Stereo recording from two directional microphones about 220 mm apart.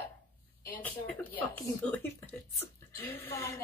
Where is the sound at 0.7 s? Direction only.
5° left (ahead or behind).